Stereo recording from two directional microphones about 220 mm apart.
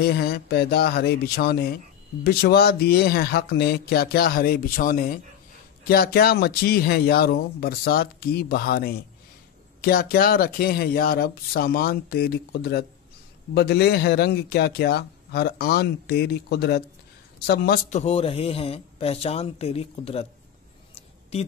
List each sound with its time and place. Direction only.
0.0 s a man's voice: 45° left (ahead or behind)
17.9 s a man's voice: 25° left (ahead or behind)
20.9 s a sound: 30° left (ahead or behind)